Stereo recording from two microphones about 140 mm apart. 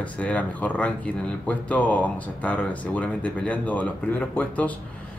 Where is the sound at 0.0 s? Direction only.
10° left (ahead or behind).